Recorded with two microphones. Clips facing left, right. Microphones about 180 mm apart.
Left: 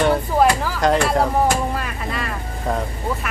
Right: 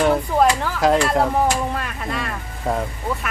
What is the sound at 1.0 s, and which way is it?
Speech, centre (ahead or behind).